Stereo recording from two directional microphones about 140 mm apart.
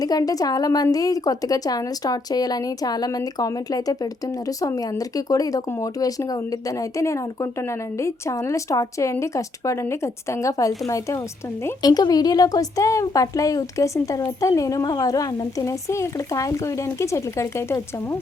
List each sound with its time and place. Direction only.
0.0 s a woman's voice: 25° left (ahead or behind)